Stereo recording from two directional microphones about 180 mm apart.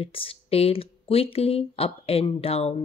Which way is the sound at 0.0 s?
30° left (ahead or behind).